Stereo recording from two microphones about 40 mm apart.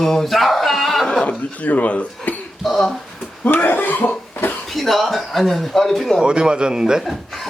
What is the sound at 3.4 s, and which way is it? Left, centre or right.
Speech, left.